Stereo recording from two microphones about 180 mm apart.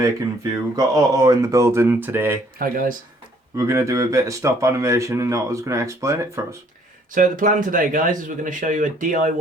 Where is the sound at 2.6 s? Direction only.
50° right (ahead or behind).